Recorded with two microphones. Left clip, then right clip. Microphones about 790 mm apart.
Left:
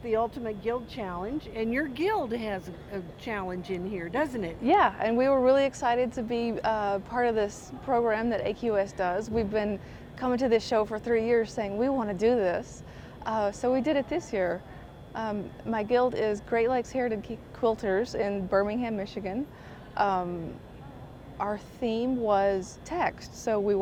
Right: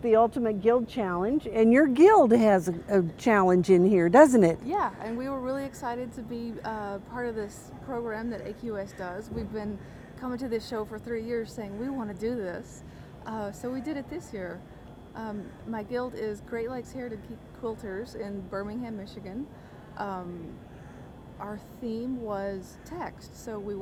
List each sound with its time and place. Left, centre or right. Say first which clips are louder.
0.0 s speech: right 6 dB; right
4.6 s a woman's voice: left 7 dB; left
21.3 s a woman's voice: left 8 dB; left